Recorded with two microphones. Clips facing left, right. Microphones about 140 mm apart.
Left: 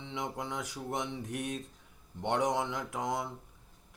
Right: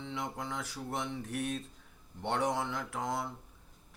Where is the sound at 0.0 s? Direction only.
20° left (ahead or behind).